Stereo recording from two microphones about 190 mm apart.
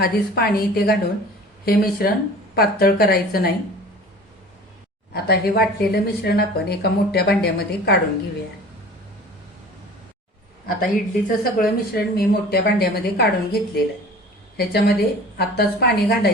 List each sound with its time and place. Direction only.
0.0 s speech: 55° left (ahead or behind)
5.1 s speech: 55° left (ahead or behind)
10.8 s a woman's voice: 45° left (ahead or behind)